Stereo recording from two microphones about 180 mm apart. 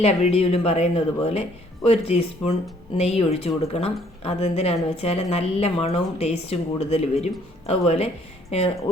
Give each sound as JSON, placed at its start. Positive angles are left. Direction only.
{"t": 0.0, "sound": "speech", "side_deg": 35}